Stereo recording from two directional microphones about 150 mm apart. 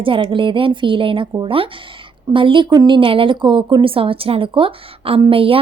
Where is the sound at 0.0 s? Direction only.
35° right (ahead or behind).